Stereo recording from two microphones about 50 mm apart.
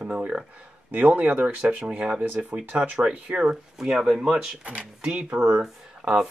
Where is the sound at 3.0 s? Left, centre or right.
Right.